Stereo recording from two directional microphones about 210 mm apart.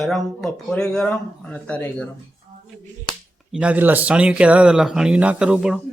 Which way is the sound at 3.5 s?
5° right (ahead or behind).